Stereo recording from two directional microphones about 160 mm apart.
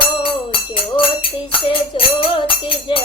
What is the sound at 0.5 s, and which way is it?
Music, 35° left (ahead or behind).